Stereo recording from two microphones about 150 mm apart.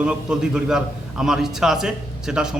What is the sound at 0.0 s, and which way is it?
Speech, 5° right (ahead or behind).